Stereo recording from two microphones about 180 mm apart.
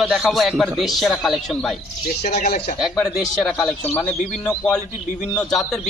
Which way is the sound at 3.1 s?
Centre (ahead or behind).